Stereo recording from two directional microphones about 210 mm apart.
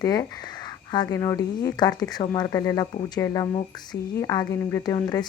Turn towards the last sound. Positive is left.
turn(degrees=20)  # may be behind; listen again after turning